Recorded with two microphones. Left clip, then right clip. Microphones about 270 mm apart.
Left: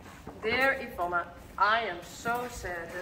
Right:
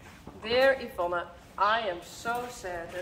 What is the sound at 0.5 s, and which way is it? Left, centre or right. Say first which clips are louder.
A woman's voice: right 3 dB; centre.